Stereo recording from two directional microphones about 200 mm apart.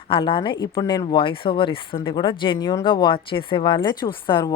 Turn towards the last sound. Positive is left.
turn(degrees=20)  # may be behind; listen again after turning